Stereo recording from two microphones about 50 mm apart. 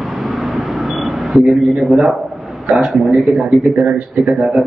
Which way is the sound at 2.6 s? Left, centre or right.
Centre.